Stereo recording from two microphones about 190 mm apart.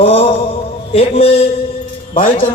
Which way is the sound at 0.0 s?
30° left (ahead or behind).